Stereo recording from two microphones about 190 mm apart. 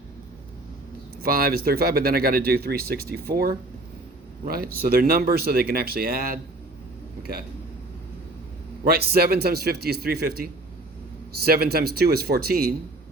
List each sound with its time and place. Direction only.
1.2 s speech: 50° right (ahead or behind)
8.8 s a man's voice: 55° right (ahead or behind)